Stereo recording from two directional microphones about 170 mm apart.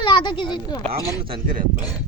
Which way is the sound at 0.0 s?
30° left (ahead or behind).